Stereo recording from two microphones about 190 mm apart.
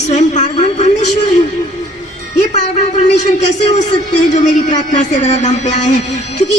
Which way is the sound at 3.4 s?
35° left (ahead or behind).